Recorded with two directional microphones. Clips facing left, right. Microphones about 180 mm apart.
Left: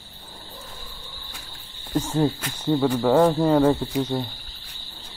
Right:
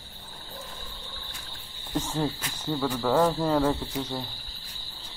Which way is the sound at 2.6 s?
25° left (ahead or behind).